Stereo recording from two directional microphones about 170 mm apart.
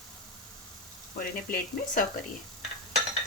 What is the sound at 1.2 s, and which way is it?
Speech, 55° left (ahead or behind).